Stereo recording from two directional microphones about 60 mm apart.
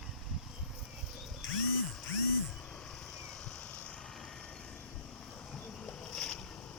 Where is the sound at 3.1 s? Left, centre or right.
Centre.